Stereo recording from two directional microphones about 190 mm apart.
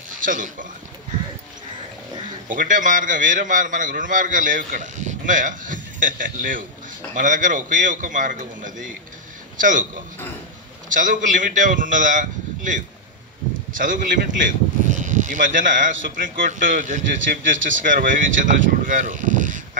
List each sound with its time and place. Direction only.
0.2 s a man's voice: 45° right (ahead or behind)
2.4 s a man's voice: 45° right (ahead or behind)
10.9 s a man's voice: 45° right (ahead or behind)